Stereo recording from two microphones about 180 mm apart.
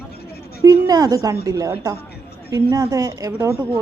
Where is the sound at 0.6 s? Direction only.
20° right (ahead or behind).